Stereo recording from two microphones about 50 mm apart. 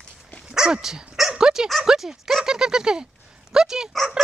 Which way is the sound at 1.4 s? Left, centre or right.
Centre.